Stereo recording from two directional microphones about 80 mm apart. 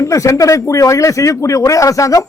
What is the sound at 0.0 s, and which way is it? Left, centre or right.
A man's voice, left.